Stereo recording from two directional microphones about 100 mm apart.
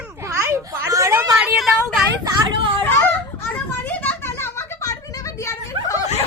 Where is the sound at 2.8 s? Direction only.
20° left (ahead or behind).